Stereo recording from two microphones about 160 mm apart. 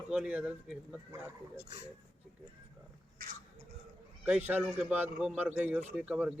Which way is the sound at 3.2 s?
70° right (ahead or behind).